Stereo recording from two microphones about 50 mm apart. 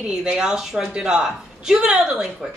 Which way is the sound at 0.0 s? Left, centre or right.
Centre.